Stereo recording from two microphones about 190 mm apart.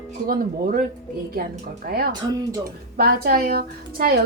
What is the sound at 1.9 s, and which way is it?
A woman's voice, 55° right (ahead or behind).